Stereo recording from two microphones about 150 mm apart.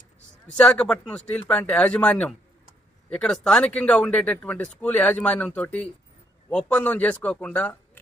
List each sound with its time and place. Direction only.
0.5 s speech: 5° left (ahead or behind)